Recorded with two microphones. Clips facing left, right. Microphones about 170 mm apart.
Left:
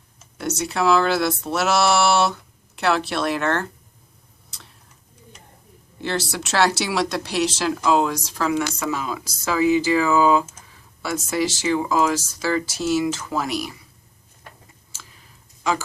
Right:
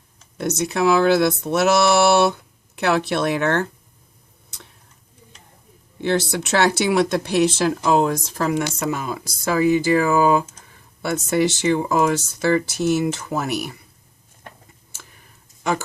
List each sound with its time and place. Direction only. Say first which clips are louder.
0.3 s speech: right 3 dB; 55° right (ahead or behind)
6.0 s speech: right 5 dB; 55° right (ahead or behind)
14.9 s a sound: even; 55° right (ahead or behind)